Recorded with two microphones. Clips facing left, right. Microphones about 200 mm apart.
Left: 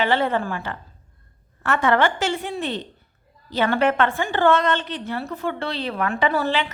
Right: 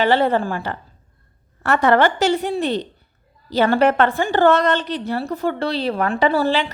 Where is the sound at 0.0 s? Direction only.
35° right (ahead or behind).